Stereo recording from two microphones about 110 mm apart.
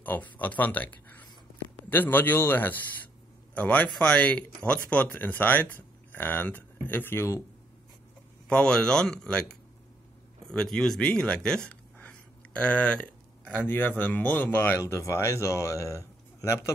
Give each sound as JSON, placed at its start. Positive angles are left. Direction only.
{"t": 0.0, "sound": "speech", "side_deg": 15}
{"t": 8.5, "sound": "speech", "side_deg": 10}
{"t": 11.7, "sound": "a sound", "side_deg": 15}
{"t": 13.6, "sound": "speech", "side_deg": 20}